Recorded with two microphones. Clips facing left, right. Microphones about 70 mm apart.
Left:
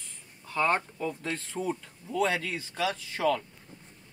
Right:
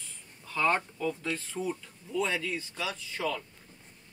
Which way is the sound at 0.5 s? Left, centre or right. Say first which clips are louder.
Left 1 dB; left.